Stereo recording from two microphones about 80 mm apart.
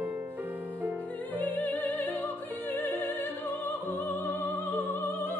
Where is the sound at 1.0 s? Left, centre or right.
Left.